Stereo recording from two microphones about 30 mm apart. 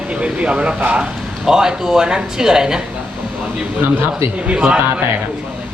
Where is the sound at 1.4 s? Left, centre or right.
Right.